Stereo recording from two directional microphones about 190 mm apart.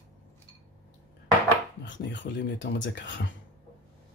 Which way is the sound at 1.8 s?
70° left (ahead or behind).